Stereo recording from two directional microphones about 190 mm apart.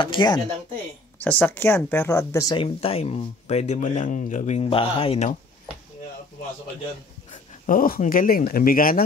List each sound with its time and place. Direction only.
0.0 s speech: 25° left (ahead or behind)
1.2 s speech: 10° left (ahead or behind); by 5.3 s 30° left (ahead or behind)
7.6 s speech: 45° left (ahead or behind)